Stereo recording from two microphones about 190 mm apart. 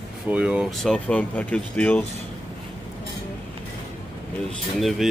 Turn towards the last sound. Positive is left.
turn(degrees=0)  # may be behind; listen again after turning